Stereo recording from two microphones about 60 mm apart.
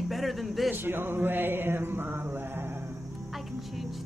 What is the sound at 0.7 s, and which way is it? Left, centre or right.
Mantra, right.